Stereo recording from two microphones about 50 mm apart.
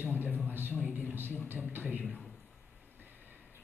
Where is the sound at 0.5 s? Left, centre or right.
Right.